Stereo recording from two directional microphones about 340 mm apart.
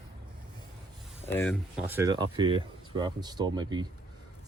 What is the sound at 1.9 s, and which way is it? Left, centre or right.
Speech, centre.